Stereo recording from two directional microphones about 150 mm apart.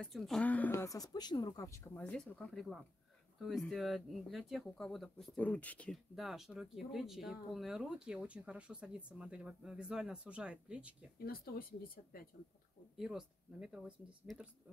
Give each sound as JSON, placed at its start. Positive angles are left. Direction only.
{"t": 0.0, "sound": "speech", "side_deg": 0}
{"t": 2.0, "sound": "speech", "side_deg": 5}
{"t": 11.1, "sound": "speech", "side_deg": 80}
{"t": 12.9, "sound": "speech", "side_deg": -5}